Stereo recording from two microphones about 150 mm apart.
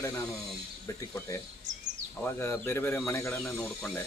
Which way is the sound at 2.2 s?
15° left (ahead or behind).